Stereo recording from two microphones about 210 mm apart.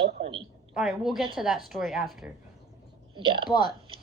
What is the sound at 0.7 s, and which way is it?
A woman's voice, centre (ahead or behind).